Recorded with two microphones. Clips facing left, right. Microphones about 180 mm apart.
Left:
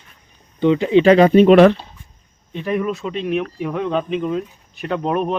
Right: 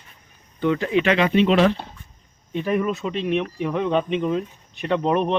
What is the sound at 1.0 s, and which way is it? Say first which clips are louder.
Speech: left 9 dB; 40° left (ahead or behind).